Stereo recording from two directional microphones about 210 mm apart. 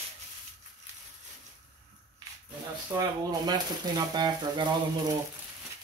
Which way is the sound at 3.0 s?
20° right (ahead or behind).